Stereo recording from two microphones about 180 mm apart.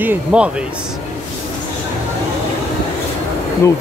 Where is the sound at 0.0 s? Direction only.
10° right (ahead or behind).